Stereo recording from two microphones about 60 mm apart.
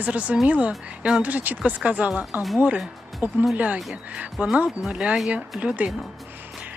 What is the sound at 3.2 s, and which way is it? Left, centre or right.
Speech, right.